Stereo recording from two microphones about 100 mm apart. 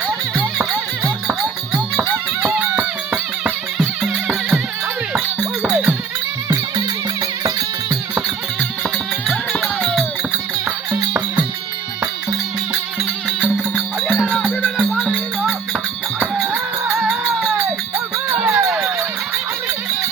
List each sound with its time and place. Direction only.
0.3 s music: 25° right (ahead or behind)
2.4 s music: 20° right (ahead or behind)
5.6 s music: 10° right (ahead or behind)
9.2 s music: centre (ahead or behind)
10.9 s music: 20° right (ahead or behind)
14.2 s music: centre (ahead or behind)
14.8 s music: 10° right (ahead or behind)
18.3 s music: 15° right (ahead or behind)